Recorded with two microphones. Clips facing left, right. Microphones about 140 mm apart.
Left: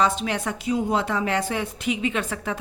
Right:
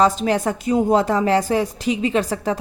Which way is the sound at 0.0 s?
40° right (ahead or behind).